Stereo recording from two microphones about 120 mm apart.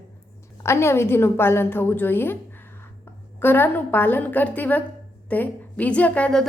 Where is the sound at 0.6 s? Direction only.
20° left (ahead or behind).